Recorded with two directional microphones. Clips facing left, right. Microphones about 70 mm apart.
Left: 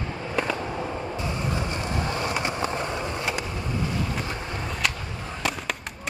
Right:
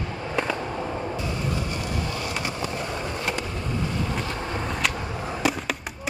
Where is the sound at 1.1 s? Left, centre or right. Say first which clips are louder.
Even; left.